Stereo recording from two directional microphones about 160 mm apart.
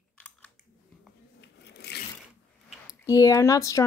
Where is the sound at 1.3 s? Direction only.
90° left.